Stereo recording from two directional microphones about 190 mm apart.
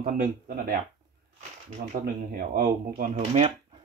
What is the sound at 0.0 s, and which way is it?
Speech, 45° right (ahead or behind).